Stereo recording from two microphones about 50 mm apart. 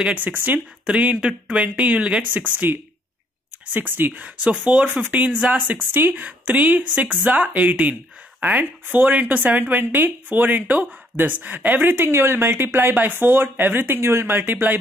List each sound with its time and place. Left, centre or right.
0.2 s speech: right
0.8 s speech: right
2.3 s speech: right
6.4 s speech: right
14.3 s speech: right